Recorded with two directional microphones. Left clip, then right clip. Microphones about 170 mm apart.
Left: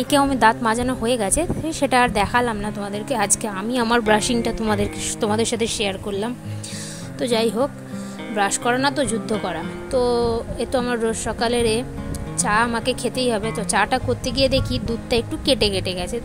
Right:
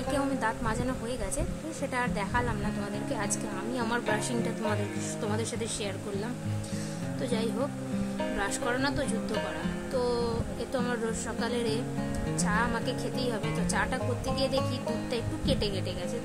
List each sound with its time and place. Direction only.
0.1 s a woman's voice: 50° left (ahead or behind)